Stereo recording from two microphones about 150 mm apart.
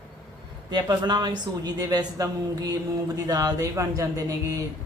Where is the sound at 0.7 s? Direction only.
30° right (ahead or behind).